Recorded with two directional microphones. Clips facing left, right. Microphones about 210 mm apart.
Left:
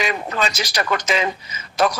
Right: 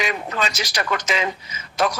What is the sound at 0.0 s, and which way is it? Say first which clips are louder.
Speech: left 2 dB; 35° left (ahead or behind).